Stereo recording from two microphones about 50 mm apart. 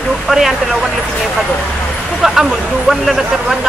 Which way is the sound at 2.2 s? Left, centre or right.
Centre.